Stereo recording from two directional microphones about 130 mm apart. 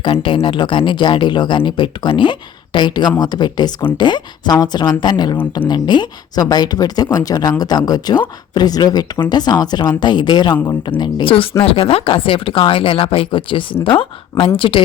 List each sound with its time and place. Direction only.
0.0 s speech: 40° left (ahead or behind)